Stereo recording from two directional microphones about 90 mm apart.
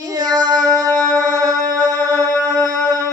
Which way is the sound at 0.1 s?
45° right (ahead or behind).